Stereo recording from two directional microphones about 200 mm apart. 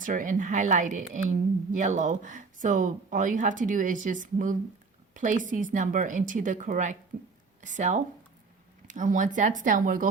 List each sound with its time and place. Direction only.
0.0 s speech: 40° right (ahead or behind)